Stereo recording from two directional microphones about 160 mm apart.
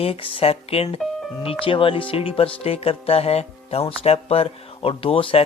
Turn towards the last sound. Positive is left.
turn(degrees=35)  # may be behind; listen again after turning